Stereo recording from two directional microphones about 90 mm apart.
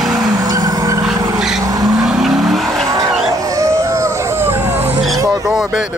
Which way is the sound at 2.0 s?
5° right (ahead or behind).